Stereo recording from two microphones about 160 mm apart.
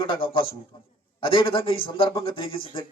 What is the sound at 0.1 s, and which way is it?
Speech, 35° left (ahead or behind).